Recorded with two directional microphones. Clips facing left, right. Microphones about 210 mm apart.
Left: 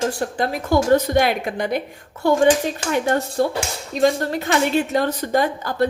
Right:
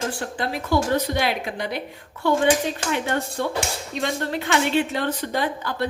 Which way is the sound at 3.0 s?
40° left (ahead or behind).